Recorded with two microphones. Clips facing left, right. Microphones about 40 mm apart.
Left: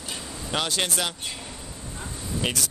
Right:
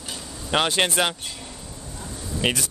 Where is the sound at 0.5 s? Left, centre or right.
Right.